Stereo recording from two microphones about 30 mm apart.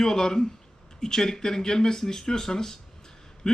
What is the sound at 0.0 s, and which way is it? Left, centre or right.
A man's voice, centre.